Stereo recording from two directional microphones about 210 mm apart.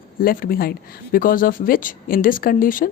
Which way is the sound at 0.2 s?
45° left (ahead or behind).